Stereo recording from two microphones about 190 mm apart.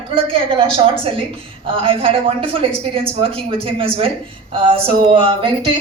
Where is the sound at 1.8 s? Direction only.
30° right (ahead or behind).